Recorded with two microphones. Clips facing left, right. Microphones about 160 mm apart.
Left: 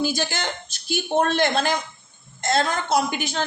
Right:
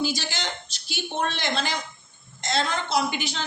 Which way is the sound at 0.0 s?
50° left (ahead or behind).